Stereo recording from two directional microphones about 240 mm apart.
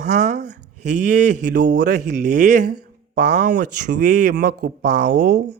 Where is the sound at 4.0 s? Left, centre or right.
Right.